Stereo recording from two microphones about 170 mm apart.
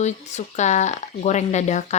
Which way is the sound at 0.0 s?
45° left (ahead or behind).